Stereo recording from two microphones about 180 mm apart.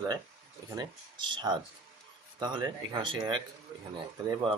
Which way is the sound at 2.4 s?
25° right (ahead or behind).